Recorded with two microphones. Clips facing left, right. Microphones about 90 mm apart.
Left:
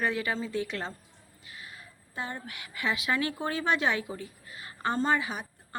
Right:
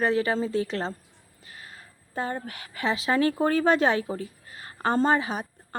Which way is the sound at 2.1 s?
40° right (ahead or behind).